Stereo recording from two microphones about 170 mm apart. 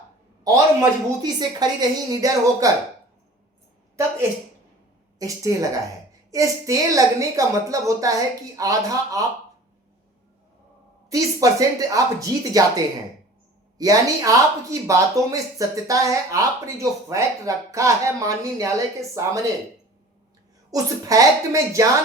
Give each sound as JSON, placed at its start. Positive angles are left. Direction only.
{"t": 0.4, "sound": "speech", "side_deg": -20}
{"t": 5.2, "sound": "speech", "side_deg": -20}
{"t": 11.1, "sound": "speech", "side_deg": -20}
{"t": 20.7, "sound": "speech", "side_deg": -20}